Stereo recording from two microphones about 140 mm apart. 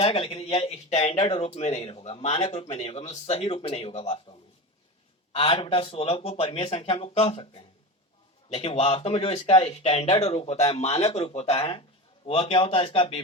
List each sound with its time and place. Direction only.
0.0 s speech: 40° left (ahead or behind)
5.3 s a man's voice: 40° left (ahead or behind)